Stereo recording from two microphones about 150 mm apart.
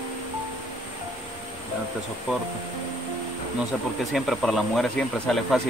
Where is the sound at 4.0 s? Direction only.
Centre (ahead or behind).